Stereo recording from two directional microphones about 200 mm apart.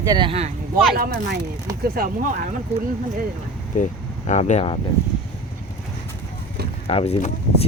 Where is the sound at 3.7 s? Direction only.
40° left (ahead or behind).